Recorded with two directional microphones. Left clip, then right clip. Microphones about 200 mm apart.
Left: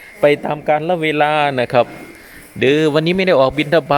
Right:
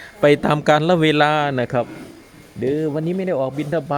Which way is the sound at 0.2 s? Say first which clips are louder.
Left 1 dB; 15° right (ahead or behind).